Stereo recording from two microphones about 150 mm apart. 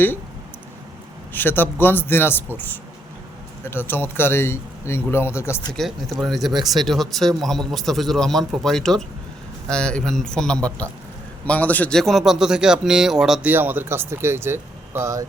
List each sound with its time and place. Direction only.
1.3 s speech: 15° left (ahead or behind)
3.6 s speech: 15° left (ahead or behind)
5.7 s speech: centre (ahead or behind); by 15.2 s 20° right (ahead or behind)